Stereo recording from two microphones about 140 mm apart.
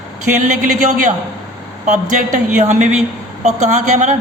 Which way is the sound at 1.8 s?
60° right (ahead or behind).